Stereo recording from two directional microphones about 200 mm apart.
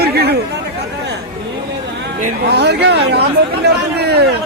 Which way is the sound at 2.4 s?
55° right (ahead or behind).